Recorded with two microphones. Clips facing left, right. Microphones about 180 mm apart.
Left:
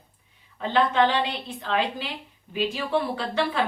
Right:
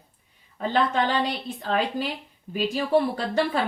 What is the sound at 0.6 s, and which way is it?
Speech, 45° right (ahead or behind).